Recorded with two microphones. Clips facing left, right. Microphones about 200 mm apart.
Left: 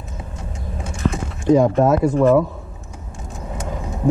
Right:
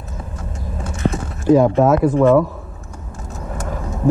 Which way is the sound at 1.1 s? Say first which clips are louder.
Right 2 dB; 5° right (ahead or behind).